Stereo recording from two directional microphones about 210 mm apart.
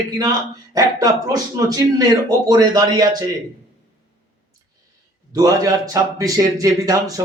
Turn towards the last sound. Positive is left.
turn(degrees=-15)  # may be behind; listen again after turning